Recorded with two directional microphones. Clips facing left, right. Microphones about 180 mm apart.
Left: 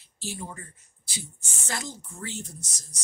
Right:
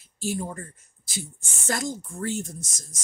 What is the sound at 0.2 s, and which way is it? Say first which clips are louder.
Speech: right 8 dB; 45° right (ahead or behind).